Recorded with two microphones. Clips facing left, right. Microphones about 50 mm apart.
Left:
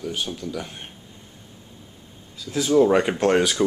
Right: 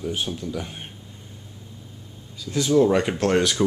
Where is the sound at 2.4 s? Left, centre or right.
Centre.